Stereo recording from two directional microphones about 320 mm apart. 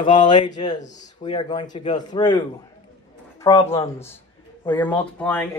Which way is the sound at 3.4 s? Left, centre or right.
Centre.